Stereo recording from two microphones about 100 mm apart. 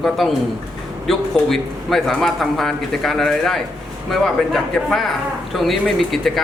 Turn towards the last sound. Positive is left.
turn(degrees=0)  # may be behind; listen again after turning